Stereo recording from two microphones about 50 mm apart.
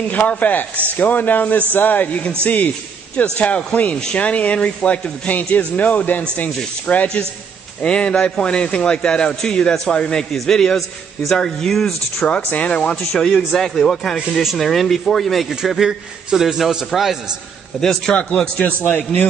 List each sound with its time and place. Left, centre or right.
0.1 s a man's voice: left
7.8 s a man's voice: left
12.4 s a man's voice: left
13.5 s speech: centre
14.4 s a man's voice: centre
17.7 s speech: centre
18.1 s a man's voice: left